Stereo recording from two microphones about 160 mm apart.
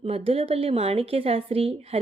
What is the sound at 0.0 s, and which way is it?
Speech, 40° right (ahead or behind).